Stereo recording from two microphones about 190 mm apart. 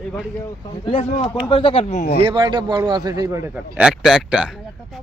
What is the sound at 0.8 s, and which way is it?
Speech, 30° left (ahead or behind).